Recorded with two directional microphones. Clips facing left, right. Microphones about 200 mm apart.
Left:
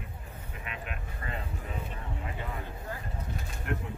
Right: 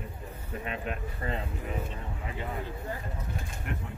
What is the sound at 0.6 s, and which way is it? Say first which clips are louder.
Speech: right 6 dB; 35° right (ahead or behind).